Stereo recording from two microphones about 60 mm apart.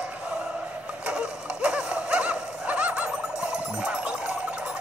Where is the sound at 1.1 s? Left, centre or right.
Centre.